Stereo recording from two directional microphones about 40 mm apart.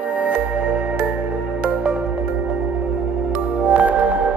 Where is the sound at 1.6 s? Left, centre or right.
Right.